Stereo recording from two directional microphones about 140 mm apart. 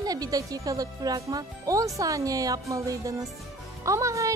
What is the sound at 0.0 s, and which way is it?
A woman's voice, 25° right (ahead or behind).